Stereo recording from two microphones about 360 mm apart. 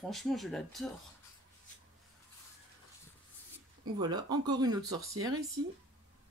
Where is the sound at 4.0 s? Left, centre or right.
Centre.